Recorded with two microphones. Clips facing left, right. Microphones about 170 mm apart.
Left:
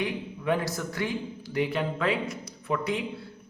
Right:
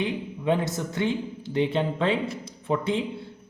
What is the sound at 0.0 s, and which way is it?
Speech, 20° right (ahead or behind).